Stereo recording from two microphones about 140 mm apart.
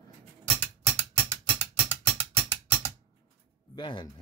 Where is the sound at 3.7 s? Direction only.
35° left (ahead or behind).